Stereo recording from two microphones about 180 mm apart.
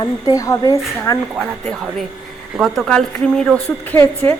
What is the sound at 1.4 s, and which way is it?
A woman's voice, 5° left (ahead or behind).